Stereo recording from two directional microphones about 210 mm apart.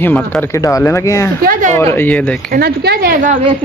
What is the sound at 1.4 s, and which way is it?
Speech, 40° right (ahead or behind).